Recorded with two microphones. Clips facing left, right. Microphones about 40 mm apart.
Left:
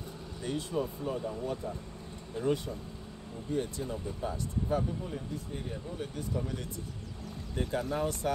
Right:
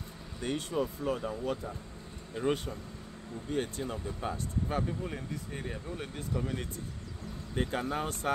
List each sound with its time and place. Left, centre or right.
0.4 s speech: right
0.7 s speech: right
2.4 s speech: right
7.5 s speech: right